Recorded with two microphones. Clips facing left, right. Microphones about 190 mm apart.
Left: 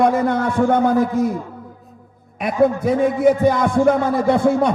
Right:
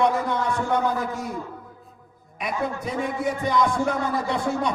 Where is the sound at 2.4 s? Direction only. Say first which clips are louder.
Left 11 dB; 55° left (ahead or behind).